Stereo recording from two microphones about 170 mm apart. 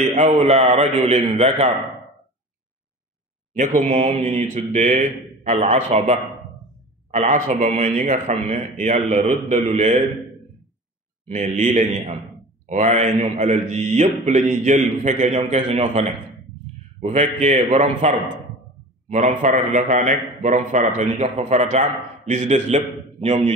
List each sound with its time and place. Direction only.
0.1 s a man's voice: 45° right (ahead or behind)
3.5 s a man's voice: 45° right (ahead or behind)
11.2 s speech: 45° right (ahead or behind)